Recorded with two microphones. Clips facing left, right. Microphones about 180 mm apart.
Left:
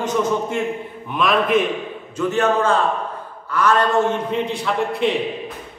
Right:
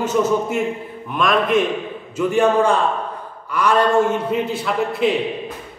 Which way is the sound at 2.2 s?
10° right (ahead or behind).